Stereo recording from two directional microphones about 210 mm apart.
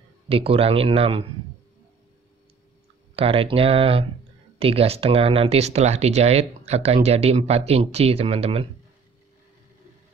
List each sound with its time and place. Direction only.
0.3 s speech: 25° right (ahead or behind)
3.2 s speech: 25° right (ahead or behind)